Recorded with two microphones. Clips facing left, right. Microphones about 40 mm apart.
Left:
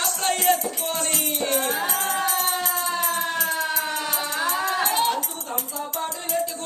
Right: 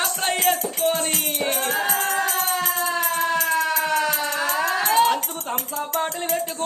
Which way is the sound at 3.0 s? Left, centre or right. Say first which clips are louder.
Right 3 dB; right.